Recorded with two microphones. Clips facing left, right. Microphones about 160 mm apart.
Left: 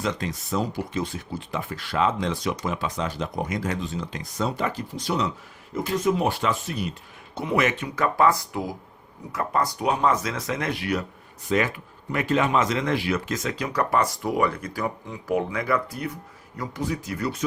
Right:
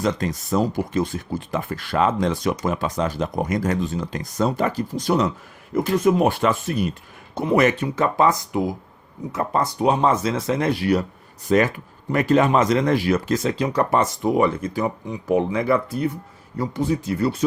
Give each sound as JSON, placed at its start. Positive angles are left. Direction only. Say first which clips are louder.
{"t": 0.0, "sound": "speech", "louder": "right 5 dB", "side_deg": -40}
{"t": 7.3, "sound": "speech", "louder": "right 6 dB", "side_deg": -40}